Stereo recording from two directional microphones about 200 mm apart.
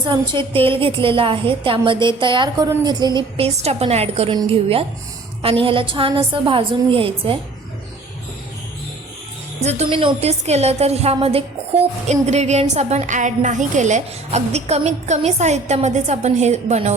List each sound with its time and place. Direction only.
0.0 s a woman's voice: 25° right (ahead or behind)
9.6 s a woman's voice: 30° right (ahead or behind)